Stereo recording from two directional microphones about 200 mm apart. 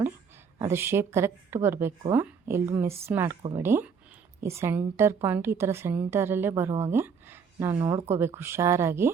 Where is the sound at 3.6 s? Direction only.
10° right (ahead or behind).